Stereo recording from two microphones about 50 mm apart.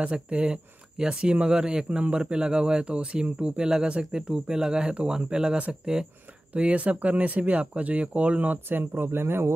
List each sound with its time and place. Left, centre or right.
0.0 s speech: right
6.5 s speech: right
8.6 s speech: right